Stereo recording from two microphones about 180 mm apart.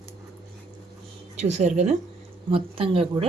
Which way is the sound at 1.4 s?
40° right (ahead or behind).